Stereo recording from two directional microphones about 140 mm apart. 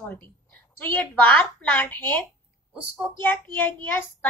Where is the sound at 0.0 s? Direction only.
15° left (ahead or behind).